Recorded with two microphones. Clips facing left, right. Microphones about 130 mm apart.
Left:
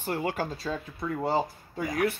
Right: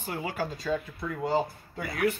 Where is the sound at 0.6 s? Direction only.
30° left (ahead or behind).